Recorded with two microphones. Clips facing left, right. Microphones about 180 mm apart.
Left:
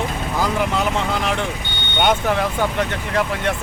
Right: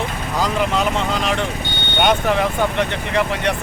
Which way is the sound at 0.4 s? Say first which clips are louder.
Right 2 dB; 15° right (ahead or behind).